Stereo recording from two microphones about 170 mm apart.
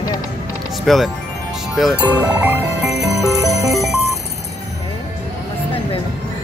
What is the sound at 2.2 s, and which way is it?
Frog, 10° right (ahead or behind).